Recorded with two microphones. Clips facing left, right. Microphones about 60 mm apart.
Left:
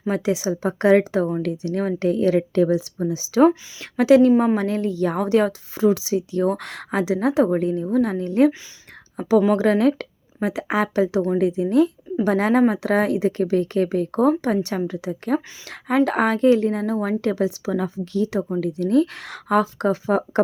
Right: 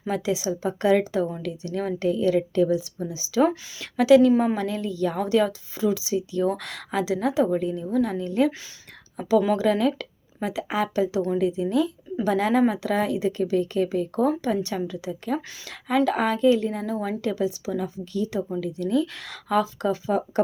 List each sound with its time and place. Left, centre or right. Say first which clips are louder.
0.1 s a woman's voice: left 3 dB; left
3.9 s a woman's voice: left 2 dB; left
7.9 s a woman's voice: left 3 dB; left
17.2 s a woman's voice: left 4 dB; left
18.6 s a woman's voice: left 7 dB; left